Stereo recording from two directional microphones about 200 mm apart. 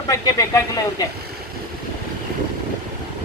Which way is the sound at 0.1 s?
15° left (ahead or behind).